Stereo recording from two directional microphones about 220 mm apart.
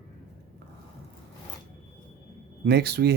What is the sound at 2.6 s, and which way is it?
Speech, 45° right (ahead or behind).